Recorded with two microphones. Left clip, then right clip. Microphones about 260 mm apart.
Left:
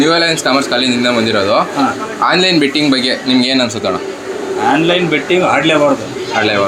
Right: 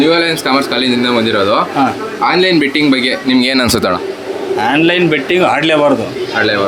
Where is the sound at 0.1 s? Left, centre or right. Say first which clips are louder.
Even; centre.